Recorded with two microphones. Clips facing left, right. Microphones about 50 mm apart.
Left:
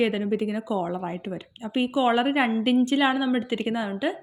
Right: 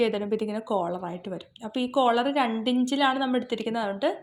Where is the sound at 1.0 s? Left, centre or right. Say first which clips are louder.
Left 2 dB; left.